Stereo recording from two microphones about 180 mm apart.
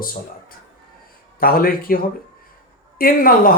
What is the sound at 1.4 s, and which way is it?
Speech, 55° left (ahead or behind).